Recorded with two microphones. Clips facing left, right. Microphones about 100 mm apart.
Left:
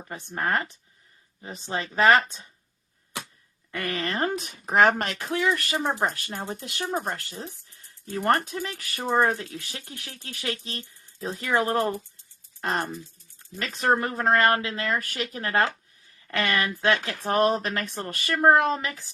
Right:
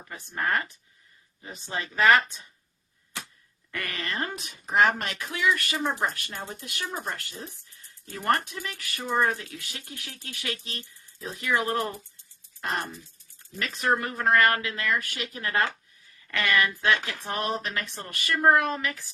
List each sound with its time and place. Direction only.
0.1 s speech: 25° left (ahead or behind)
3.7 s speech: 25° left (ahead or behind)
6.8 s speech: 40° left (ahead or behind)
17.2 s speech: 40° left (ahead or behind); by 19.0 s 25° left (ahead or behind)